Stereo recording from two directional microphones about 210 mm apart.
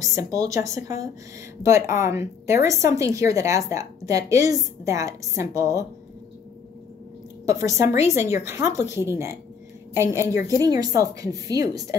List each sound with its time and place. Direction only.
0.0 s a woman's voice: 15° right (ahead or behind)
7.4 s a woman's voice: 15° right (ahead or behind)